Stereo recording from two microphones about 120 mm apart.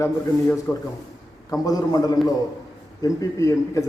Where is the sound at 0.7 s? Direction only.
20° left (ahead or behind).